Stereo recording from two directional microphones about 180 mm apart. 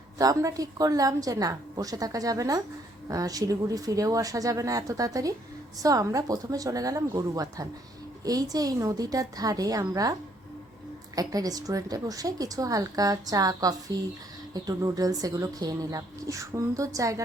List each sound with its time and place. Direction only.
0.2 s speech: 20° right (ahead or behind)